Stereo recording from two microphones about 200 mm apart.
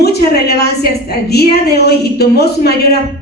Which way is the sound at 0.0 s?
55° left (ahead or behind).